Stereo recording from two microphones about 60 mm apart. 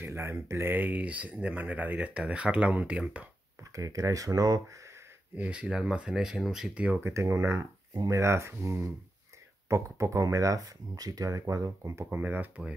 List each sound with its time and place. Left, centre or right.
0.0 s speech: right
0.7 s speech: right
3.7 s speech: right
5.3 s speech: right
6.7 s speech: right
7.2 s speech: right
8.0 s speech: right
10.2 s speech: right
11.8 s speech: right
12.1 s speech: right